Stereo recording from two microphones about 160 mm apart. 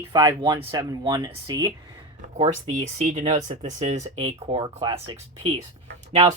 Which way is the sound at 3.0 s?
50° right (ahead or behind).